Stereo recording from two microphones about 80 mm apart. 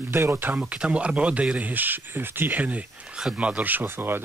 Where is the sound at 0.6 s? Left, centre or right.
Centre.